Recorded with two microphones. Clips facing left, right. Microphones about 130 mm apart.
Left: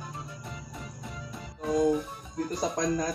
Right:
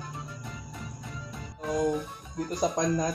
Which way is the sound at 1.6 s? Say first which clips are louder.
Left 2 dB; 15° left (ahead or behind).